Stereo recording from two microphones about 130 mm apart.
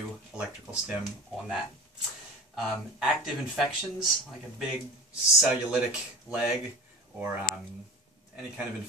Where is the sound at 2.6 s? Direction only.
Centre (ahead or behind).